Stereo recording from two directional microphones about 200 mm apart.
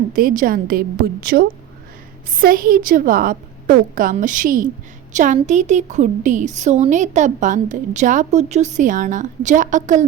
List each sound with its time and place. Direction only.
0.1 s a woman's voice: 45° right (ahead or behind)